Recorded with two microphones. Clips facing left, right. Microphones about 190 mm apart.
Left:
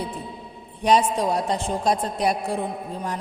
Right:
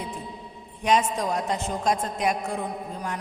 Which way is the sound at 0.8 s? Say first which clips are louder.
Left 4 dB; 35° left (ahead or behind).